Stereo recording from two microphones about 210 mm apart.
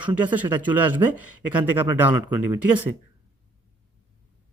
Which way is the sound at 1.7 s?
10° right (ahead or behind).